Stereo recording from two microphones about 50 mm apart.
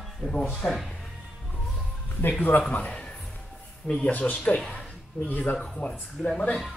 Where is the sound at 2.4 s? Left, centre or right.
Left.